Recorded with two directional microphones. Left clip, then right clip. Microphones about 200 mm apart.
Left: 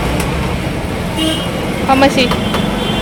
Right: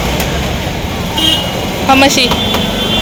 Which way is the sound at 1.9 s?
Centre (ahead or behind).